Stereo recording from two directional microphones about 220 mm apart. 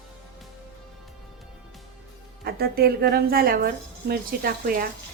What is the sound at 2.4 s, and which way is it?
A woman's voice, 45° right (ahead or behind).